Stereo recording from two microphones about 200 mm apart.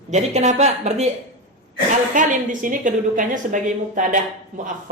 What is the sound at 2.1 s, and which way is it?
A woman's voice, 40° right (ahead or behind).